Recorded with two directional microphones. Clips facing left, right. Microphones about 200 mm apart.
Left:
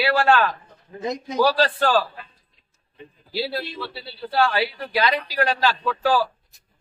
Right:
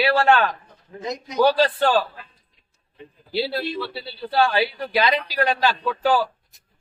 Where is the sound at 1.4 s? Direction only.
20° right (ahead or behind).